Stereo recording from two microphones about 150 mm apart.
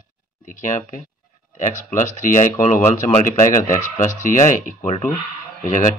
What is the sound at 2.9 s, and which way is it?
Speech, 45° left (ahead or behind).